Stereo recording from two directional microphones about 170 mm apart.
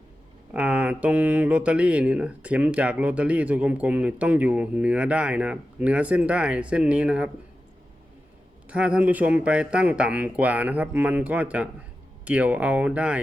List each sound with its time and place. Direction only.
0.5 s speech: 10° right (ahead or behind)
8.6 s speech: 5° right (ahead or behind)